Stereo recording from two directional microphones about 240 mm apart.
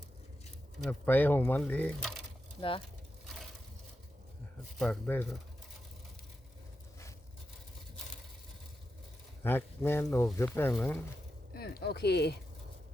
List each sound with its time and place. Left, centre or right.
0.8 s speech: centre
2.6 s speech: left
4.8 s speech: centre
9.4 s speech: centre
11.5 s speech: left